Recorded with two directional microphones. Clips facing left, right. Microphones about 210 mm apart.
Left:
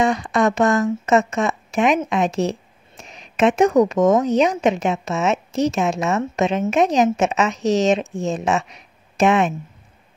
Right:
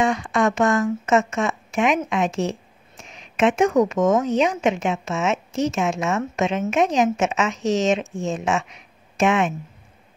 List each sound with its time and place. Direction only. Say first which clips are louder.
0.0 s speech: left 2 dB; 35° left (ahead or behind)